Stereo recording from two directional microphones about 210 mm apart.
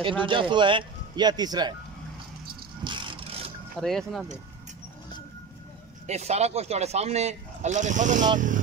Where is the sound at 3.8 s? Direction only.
Centre (ahead or behind).